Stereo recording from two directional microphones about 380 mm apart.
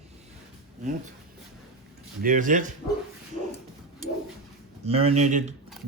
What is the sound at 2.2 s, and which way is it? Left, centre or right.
Speech, right.